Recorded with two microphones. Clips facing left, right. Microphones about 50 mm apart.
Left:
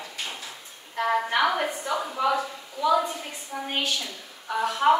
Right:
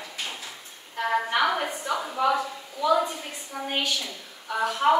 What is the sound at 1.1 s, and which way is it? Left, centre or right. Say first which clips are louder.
A woman's voice: right 1 dB; centre.